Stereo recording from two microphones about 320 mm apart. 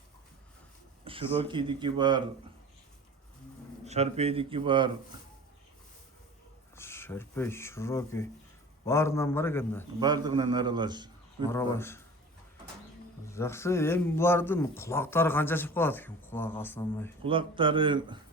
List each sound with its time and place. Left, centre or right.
1.1 s a sound: centre
1.4 s a man's voice: centre
3.8 s a man's voice: centre
6.7 s speech: centre
10.0 s a man's voice: centre
11.4 s speech: centre
13.3 s speech: centre
17.2 s a man's voice: centre